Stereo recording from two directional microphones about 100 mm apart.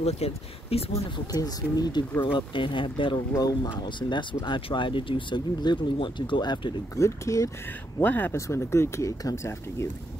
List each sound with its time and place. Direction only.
0.0 s speech: 85° left
1.1 s speech: 40° left (ahead or behind)
2.3 s speech: 55° left (ahead or behind)
3.3 s speech: 40° left (ahead or behind)
7.0 s speech: 30° left (ahead or behind)
8.0 s speech: 20° left (ahead or behind)
8.4 s speech: 30° left (ahead or behind)